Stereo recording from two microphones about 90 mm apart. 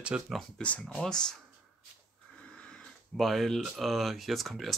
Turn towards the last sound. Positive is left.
turn(degrees=0)  # may be behind; listen again after turning